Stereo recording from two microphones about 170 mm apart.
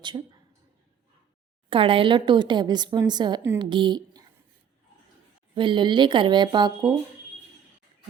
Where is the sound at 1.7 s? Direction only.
30° right (ahead or behind).